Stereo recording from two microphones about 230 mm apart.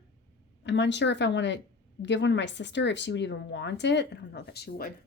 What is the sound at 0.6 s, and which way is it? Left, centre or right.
Speech, left.